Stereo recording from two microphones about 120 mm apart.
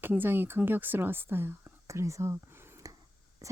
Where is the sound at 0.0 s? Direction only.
15° right (ahead or behind).